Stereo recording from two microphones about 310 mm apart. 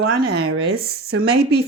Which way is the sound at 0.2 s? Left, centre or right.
Right.